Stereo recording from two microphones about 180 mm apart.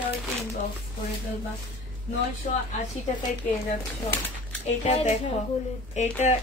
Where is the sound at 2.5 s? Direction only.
45° left (ahead or behind).